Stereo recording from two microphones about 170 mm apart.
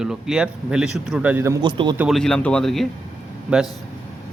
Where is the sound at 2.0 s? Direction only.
Centre (ahead or behind).